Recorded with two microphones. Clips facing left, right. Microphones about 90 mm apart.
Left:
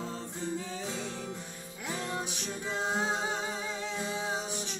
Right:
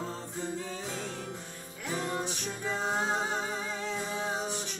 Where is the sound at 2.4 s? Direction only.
45° right (ahead or behind).